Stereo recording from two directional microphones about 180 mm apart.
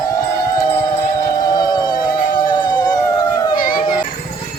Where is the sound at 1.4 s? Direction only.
25° left (ahead or behind).